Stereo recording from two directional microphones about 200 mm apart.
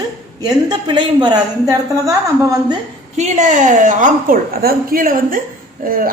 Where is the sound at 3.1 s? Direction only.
35° right (ahead or behind).